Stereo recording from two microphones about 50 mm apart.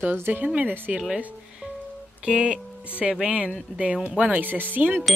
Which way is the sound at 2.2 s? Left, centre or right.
Centre.